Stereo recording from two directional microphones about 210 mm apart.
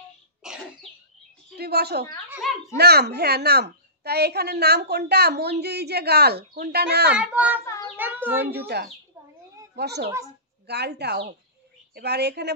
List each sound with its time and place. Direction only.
1.6 s a woman's voice: 50° right (ahead or behind)
2.2 s a child's voice: 10° right (ahead or behind)
2.8 s a woman's voice: 50° right (ahead or behind)
7.2 s a child's voice: 5° right (ahead or behind)
7.6 s child singing: 15° left (ahead or behind)
7.9 s a sound: 10° right (ahead or behind)
8.5 s a woman's voice: 50° right (ahead or behind)